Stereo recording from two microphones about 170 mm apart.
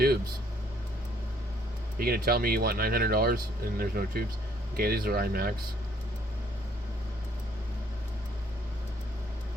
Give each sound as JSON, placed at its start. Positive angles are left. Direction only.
{"t": 2.0, "sound": "speech", "side_deg": -65}